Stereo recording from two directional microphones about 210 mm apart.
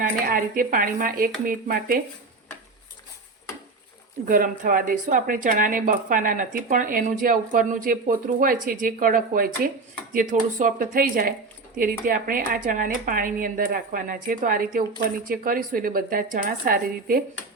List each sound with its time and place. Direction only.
0.0 s speech: 40° right (ahead or behind)
4.3 s speech: 40° right (ahead or behind)